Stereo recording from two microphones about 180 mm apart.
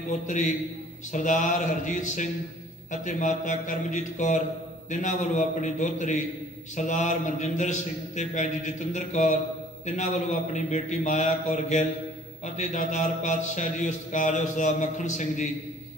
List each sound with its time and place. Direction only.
0.1 s a man's voice: 45° left (ahead or behind)
6.7 s mantra: 40° left (ahead or behind)